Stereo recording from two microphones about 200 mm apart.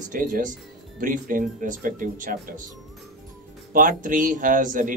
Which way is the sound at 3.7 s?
40° right (ahead or behind).